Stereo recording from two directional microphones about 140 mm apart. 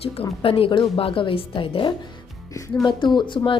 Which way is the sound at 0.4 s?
40° left (ahead or behind).